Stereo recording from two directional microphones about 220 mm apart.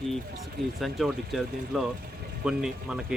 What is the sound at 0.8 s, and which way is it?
Speech, centre (ahead or behind).